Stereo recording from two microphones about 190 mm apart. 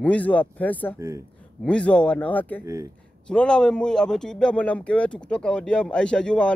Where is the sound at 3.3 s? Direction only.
5° left (ahead or behind).